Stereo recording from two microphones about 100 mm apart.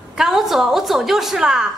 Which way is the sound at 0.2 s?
5° right (ahead or behind).